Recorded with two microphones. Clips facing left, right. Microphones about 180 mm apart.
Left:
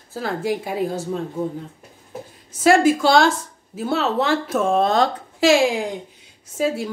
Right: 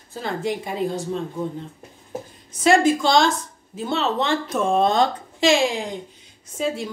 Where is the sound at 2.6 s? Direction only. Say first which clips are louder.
Left 2 dB; 5° left (ahead or behind).